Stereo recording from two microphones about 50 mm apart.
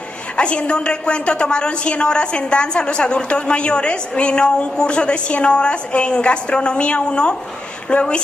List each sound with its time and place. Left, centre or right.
0.4 s a woman's voice: left